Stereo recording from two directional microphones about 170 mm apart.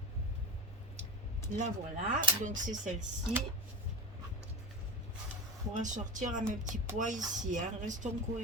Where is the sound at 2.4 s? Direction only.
50° right (ahead or behind).